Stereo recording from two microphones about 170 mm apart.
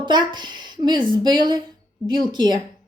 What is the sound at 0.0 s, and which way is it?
A woman's voice, 25° right (ahead or behind).